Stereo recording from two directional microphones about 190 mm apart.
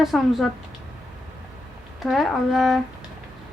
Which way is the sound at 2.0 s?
Centre (ahead or behind).